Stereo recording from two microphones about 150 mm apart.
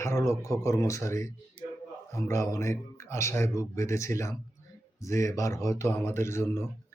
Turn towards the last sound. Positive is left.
turn(degrees=20)  # may be behind; listen again after turning